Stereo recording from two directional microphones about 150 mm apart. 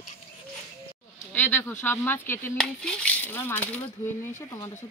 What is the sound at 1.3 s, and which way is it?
Speech, 15° left (ahead or behind).